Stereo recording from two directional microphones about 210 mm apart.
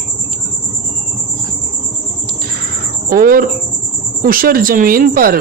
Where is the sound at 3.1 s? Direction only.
45° right (ahead or behind).